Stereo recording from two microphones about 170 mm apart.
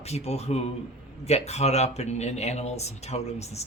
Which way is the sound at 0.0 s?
40° left (ahead or behind).